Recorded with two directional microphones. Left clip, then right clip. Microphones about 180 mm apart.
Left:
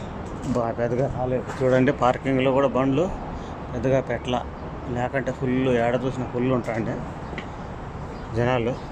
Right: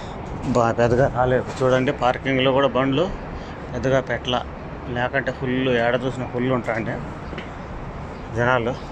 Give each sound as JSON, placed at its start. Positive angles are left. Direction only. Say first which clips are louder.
{"t": 0.5, "sound": "speech", "louder": "right 6 dB", "side_deg": 0}
{"t": 1.6, "sound": "speech", "louder": "left 1 dB", "side_deg": 25}
{"t": 2.2, "sound": "speech", "louder": "right 2 dB", "side_deg": 10}
{"t": 8.4, "sound": "speech", "louder": "right 3 dB", "side_deg": 20}